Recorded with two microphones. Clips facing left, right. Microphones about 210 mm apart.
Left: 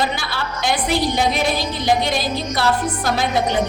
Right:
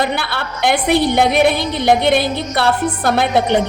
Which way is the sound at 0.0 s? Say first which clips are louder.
Right 3 dB; 60° right (ahead or behind).